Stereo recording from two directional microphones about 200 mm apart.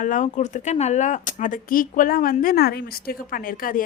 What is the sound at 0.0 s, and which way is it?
Speech, 40° left (ahead or behind).